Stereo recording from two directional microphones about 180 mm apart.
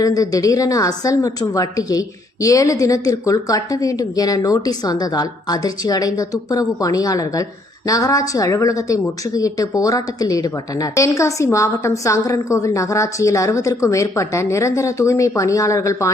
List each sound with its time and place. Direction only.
0.0 s a woman's voice: 20° left (ahead or behind)